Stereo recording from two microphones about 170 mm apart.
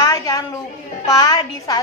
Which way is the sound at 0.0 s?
20° left (ahead or behind).